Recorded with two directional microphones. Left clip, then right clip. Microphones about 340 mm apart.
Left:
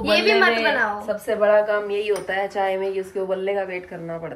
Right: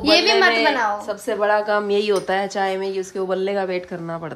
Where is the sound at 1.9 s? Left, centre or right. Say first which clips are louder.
Right 4 dB; right.